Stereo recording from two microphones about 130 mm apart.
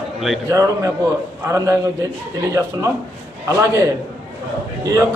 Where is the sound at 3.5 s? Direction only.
25° right (ahead or behind).